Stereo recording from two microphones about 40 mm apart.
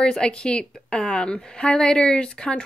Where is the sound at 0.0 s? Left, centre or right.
Left.